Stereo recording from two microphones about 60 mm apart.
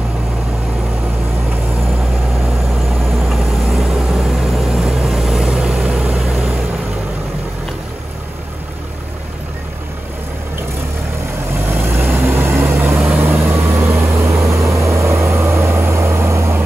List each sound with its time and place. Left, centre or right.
3.2 s vehicle: centre
5.5 s vehicle: centre
6.1 s vehicle: centre
11.5 s vehicle: right
14.5 s vehicle: right